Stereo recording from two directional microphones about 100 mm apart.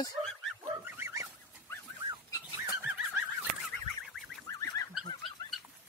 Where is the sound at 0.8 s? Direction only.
20° right (ahead or behind).